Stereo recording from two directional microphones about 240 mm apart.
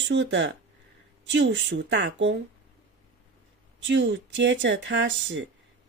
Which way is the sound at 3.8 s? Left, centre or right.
Right.